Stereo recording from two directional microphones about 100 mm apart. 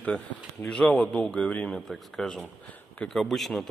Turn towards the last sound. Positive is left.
turn(degrees=5)  # may be behind; listen again after turning